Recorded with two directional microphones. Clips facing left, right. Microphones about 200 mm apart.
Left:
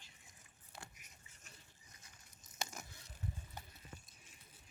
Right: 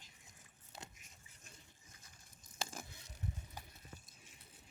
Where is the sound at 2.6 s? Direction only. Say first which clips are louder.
Right 1 dB; 30° right (ahead or behind).